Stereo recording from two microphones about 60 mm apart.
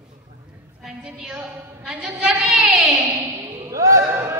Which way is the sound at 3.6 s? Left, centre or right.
Right.